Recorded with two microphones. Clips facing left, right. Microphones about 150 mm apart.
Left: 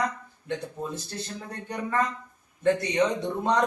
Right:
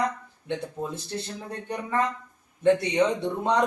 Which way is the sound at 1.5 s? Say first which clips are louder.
Right 1 dB; 15° right (ahead or behind).